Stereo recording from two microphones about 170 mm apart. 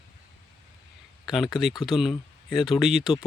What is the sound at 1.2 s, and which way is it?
Speech, centre (ahead or behind).